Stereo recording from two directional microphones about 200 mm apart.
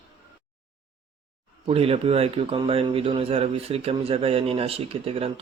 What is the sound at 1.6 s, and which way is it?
Speech, 30° right (ahead or behind).